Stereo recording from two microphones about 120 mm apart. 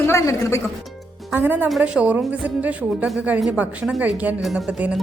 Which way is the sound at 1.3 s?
15° right (ahead or behind).